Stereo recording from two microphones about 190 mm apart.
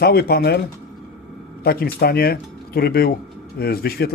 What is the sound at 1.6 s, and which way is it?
Speech, 55° left (ahead or behind).